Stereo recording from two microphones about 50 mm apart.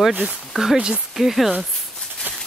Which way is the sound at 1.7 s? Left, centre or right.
Centre.